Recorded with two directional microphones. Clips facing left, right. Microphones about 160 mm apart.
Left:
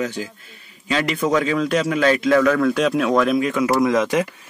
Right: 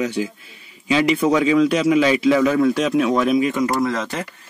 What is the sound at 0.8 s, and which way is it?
Speech, 10° right (ahead or behind).